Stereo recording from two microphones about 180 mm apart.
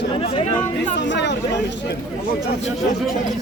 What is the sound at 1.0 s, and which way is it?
Speech, 75° left (ahead or behind).